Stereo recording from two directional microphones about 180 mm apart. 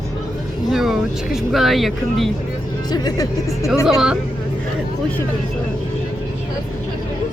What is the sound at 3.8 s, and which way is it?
Speech, 5° right (ahead or behind).